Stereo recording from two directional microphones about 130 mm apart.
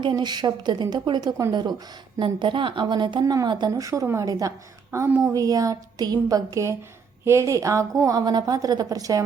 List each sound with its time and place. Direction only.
0.0 s a woman's voice: 35° right (ahead or behind)